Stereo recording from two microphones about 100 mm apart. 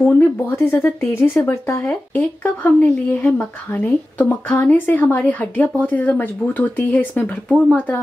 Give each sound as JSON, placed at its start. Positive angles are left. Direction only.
{"t": 0.1, "sound": "speech", "side_deg": 20}